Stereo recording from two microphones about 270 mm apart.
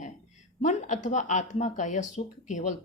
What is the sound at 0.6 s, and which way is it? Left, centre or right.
Speech, left.